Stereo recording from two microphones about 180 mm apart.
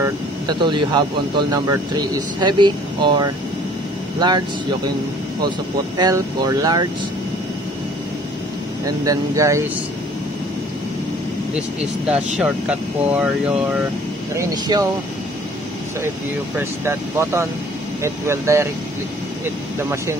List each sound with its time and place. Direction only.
0.0 s speech: 25° right (ahead or behind)
5.9 s speech: 25° right (ahead or behind)
9.0 s speech: 20° right (ahead or behind)
12.4 s speech: 5° right (ahead or behind)
14.3 s speech: 20° right (ahead or behind)
16.5 s speech: 15° right (ahead or behind)
19.8 s speech: 15° right (ahead or behind)